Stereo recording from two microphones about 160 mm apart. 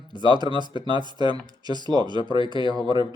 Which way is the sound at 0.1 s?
30° right (ahead or behind).